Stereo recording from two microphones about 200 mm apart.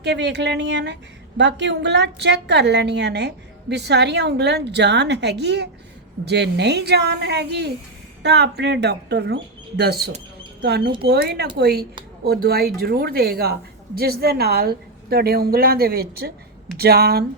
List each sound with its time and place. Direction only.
0.0 s a woman's voice: 60° right (ahead or behind)